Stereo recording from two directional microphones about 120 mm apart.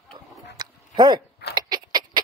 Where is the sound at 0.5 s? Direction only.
35° right (ahead or behind).